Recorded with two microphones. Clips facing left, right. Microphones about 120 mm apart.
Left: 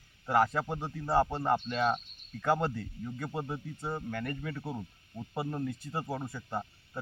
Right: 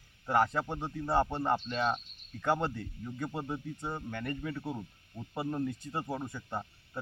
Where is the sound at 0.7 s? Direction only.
10° left (ahead or behind).